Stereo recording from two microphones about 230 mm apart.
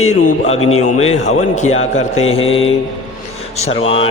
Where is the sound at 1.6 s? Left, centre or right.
Left.